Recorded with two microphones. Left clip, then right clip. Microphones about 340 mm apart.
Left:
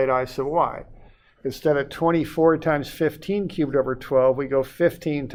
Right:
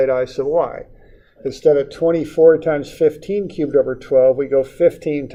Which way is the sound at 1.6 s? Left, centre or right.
Left.